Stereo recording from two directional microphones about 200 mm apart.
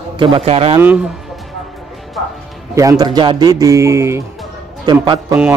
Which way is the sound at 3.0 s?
20° right (ahead or behind).